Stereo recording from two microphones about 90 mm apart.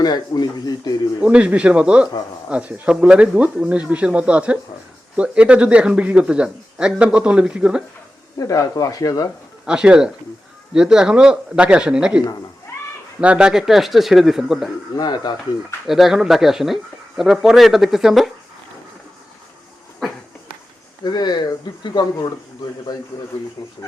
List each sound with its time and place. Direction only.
0.0 s speech: 50° left (ahead or behind)
1.2 s speech: 15° right (ahead or behind)
8.4 s speech: 40° left (ahead or behind)
9.6 s speech: 10° right (ahead or behind)
13.2 s speech: 10° right (ahead or behind)
14.9 s speech: 50° left (ahead or behind)
15.9 s speech: 5° right (ahead or behind)
21.0 s speech: 50° left (ahead or behind)